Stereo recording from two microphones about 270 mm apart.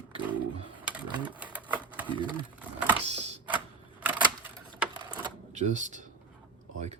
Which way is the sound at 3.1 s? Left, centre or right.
Right.